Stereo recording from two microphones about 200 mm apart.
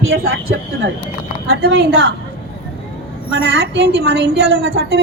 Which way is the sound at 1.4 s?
55° right (ahead or behind).